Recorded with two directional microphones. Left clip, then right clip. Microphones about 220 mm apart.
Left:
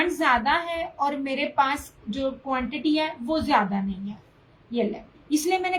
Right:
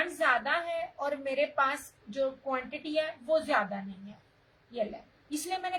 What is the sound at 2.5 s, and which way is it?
A woman's voice, 20° right (ahead or behind).